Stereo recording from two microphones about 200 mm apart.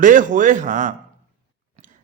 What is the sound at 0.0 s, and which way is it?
Speech, 40° right (ahead or behind).